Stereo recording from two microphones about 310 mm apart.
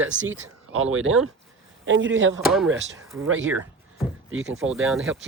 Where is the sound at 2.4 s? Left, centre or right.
Centre.